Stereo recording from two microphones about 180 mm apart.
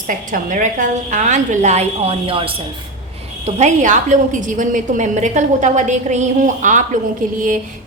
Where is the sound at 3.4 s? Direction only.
40° right (ahead or behind).